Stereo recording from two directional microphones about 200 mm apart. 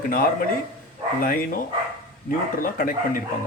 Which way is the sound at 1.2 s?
45° left (ahead or behind).